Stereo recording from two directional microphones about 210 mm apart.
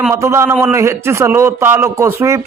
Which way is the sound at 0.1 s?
15° right (ahead or behind).